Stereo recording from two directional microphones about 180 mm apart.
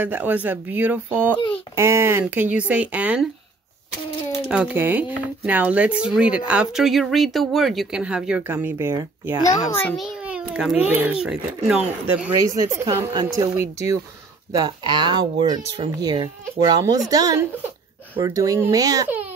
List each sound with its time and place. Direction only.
0.0 s speech: 10° right (ahead or behind)
4.5 s speech: 10° right (ahead or behind)
9.5 s a child's voice: 15° left (ahead or behind)
9.9 s speech: 5° right (ahead or behind)
12.4 s speech: 15° right (ahead or behind)